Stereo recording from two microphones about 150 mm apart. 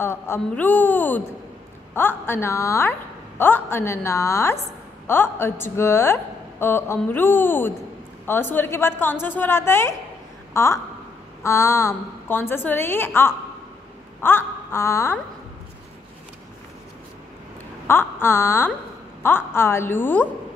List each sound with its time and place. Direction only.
0.0 s a woman's voice: 15° left (ahead or behind)
14.2 s wail: 15° left (ahead or behind)
17.8 s a woman's voice: 15° left (ahead or behind)